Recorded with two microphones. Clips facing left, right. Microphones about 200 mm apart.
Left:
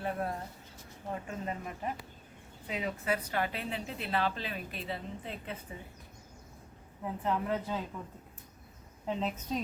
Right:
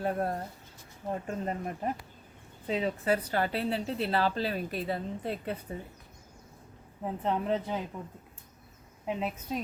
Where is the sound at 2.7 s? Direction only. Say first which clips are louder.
Right 5 dB; 30° right (ahead or behind).